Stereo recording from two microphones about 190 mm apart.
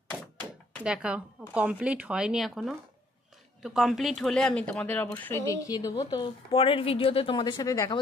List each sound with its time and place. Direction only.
0.8 s speech: 5° right (ahead or behind); by 8.0 s 20° left (ahead or behind)